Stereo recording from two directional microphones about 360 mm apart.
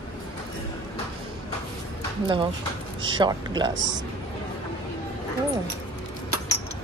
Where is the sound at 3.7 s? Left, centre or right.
Right.